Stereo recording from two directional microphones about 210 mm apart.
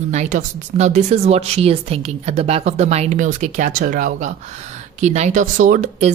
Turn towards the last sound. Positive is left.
turn(degrees=-35)  # may be behind; listen again after turning